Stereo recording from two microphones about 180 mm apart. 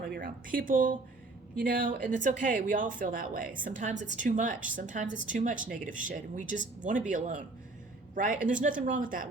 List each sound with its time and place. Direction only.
0.0 s speech: 55° right (ahead or behind)